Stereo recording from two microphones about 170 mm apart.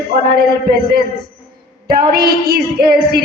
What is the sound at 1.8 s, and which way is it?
A woman's voice, 65° right (ahead or behind).